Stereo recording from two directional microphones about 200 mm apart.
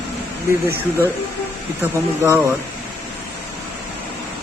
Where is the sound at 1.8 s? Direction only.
10° right (ahead or behind).